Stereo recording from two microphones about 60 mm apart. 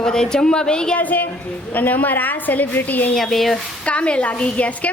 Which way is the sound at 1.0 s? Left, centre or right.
Left.